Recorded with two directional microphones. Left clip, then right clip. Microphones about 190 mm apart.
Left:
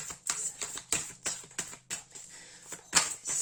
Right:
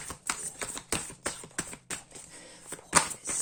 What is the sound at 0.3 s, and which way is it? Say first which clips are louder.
Typewriter: right 1 dB; 10° right (ahead or behind).